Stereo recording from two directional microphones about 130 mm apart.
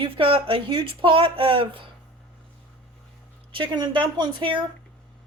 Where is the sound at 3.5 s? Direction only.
35° right (ahead or behind).